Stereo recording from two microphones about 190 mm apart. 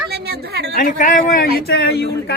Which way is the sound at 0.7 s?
45° left (ahead or behind).